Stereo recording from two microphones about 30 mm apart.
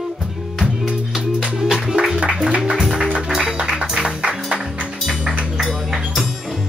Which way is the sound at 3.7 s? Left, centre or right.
Right.